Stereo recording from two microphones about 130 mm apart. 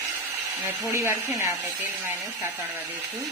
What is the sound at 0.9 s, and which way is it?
Speech, 20° right (ahead or behind).